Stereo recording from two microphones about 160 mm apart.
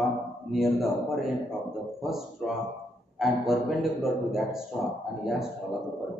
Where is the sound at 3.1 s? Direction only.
Centre (ahead or behind).